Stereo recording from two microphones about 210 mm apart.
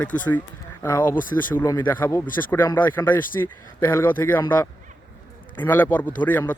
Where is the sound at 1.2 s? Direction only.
40° left (ahead or behind).